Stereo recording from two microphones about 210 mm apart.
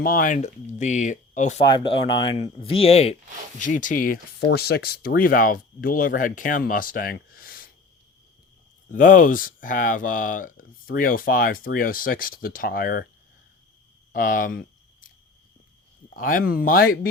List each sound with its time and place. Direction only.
0.0 s speech: 40° left (ahead or behind)
1.6 s speech: 25° left (ahead or behind); by 7.7 s 45° left (ahead or behind)
8.9 s speech: 40° left (ahead or behind)
14.1 s speech: 40° left (ahead or behind)
16.0 s speech: 40° left (ahead or behind)